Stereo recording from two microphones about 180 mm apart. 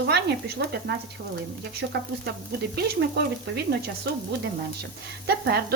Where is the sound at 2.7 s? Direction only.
65° right (ahead or behind).